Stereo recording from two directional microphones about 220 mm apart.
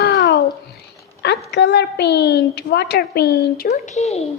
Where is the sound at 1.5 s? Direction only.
50° left (ahead or behind).